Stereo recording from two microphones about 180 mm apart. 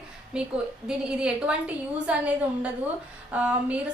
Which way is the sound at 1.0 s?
5° right (ahead or behind).